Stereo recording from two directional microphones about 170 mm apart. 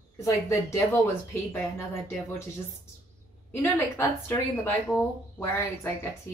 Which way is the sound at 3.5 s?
15° left (ahead or behind).